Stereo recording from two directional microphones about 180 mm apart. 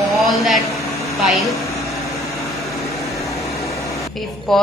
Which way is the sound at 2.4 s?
Centre (ahead or behind).